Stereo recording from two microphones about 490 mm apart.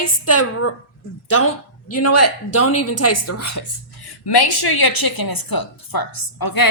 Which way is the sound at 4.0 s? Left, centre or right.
Left.